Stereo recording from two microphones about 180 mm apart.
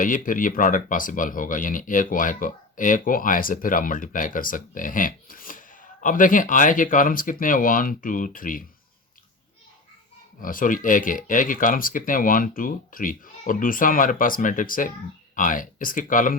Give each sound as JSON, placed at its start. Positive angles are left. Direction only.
{"t": 0.0, "sound": "speech", "side_deg": 45}
{"t": 10.4, "sound": "speech", "side_deg": 50}